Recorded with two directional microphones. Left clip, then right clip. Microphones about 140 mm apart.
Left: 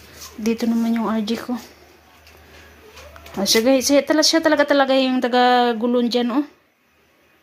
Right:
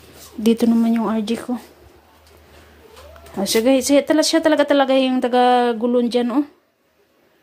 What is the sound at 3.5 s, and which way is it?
Speech, 20° right (ahead or behind).